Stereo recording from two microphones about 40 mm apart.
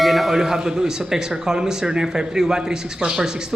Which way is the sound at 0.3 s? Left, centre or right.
Centre.